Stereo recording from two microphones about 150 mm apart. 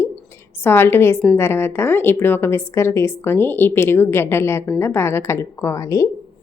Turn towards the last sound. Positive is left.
turn(degrees=20)  # may be behind; listen again after turning